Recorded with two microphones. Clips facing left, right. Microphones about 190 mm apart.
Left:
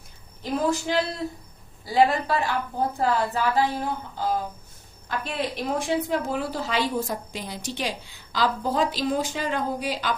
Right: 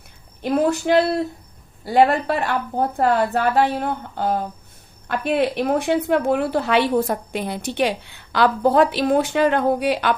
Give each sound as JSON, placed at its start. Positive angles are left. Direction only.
{"t": 0.4, "sound": "a woman's voice", "side_deg": -65}